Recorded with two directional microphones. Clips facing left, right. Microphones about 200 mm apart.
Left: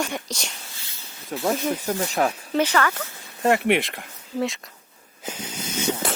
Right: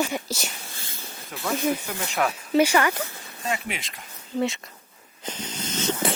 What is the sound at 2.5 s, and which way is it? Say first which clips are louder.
Speech: right 3 dB; 10° right (ahead or behind).